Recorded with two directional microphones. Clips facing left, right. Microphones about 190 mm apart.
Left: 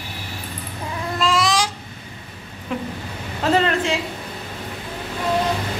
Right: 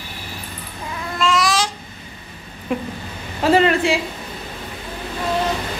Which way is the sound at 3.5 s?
10° right (ahead or behind).